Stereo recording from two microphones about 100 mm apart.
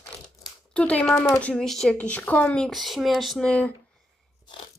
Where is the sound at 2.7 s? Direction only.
Centre (ahead or behind).